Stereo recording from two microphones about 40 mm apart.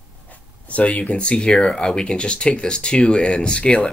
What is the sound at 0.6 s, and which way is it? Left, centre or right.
Speech, left.